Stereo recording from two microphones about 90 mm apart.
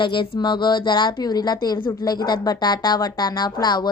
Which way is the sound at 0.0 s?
65° left (ahead or behind).